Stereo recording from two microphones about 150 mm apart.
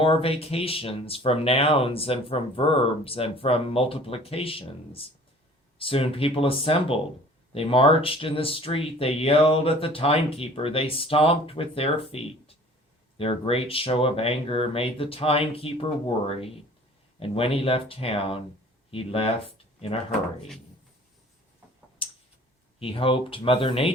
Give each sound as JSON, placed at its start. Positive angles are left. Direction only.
{"t": 0.0, "sound": "speech", "side_deg": 40}
{"t": 22.8, "sound": "speech", "side_deg": 40}